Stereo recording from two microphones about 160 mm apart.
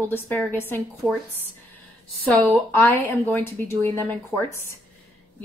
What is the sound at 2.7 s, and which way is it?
Speech, 10° left (ahead or behind).